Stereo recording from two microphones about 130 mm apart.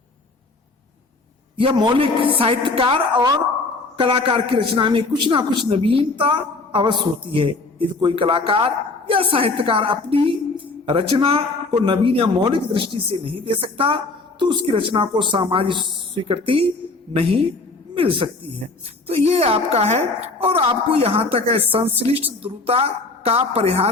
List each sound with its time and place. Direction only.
1.5 s a woman's voice: 40° right (ahead or behind)
17.9 s a woman's voice: 45° right (ahead or behind)